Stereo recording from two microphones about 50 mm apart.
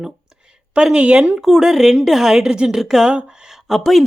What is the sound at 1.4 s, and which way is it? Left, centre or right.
A woman's voice, centre.